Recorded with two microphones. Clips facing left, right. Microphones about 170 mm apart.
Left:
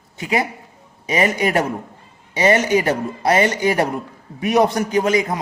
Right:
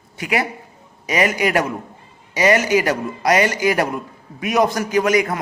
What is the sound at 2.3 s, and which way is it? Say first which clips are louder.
A man's voice: even; 30° left (ahead or behind).